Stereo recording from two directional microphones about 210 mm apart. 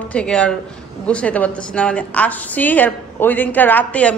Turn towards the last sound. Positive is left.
turn(degrees=5)  # may be behind; listen again after turning